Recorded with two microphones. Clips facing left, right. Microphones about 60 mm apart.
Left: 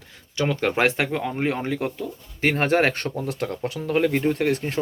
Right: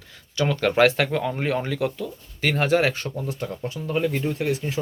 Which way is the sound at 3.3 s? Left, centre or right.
Left.